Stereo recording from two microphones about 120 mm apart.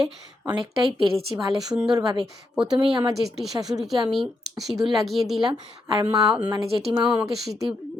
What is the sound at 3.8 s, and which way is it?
A woman's voice, centre (ahead or behind).